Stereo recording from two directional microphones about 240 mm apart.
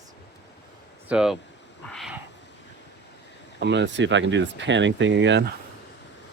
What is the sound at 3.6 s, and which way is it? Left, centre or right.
Speech, right.